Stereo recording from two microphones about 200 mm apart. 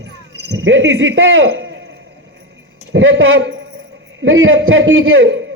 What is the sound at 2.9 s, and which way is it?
A man's voice, 70° right (ahead or behind).